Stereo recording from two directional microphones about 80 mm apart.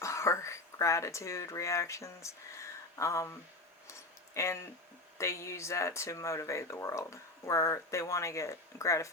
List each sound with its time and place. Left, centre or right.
0.0 s speech: left
4.4 s speech: left